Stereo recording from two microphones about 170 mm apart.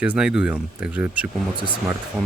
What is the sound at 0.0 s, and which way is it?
Speech, 5° right (ahead or behind).